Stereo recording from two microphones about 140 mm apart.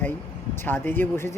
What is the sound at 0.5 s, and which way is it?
Speech, 15° left (ahead or behind).